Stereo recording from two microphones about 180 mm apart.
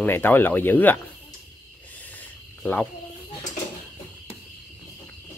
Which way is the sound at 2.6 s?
10° left (ahead or behind).